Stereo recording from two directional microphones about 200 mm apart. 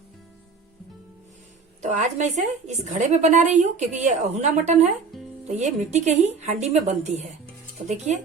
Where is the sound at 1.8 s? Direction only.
35° right (ahead or behind).